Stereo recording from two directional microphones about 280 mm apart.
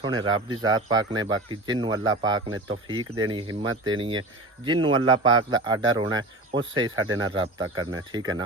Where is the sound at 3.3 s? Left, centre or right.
Centre.